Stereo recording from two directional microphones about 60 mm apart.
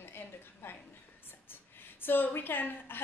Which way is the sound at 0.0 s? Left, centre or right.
Left.